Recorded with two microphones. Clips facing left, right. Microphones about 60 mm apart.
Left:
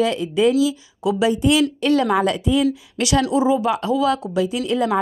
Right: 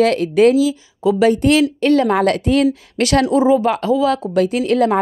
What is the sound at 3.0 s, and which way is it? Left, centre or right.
Speech, right.